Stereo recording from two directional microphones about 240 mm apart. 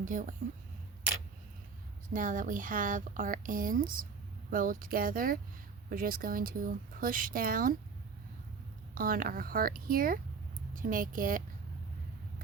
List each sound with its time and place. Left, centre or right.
0.0 s speech: right
2.1 s speech: right
9.0 s speech: right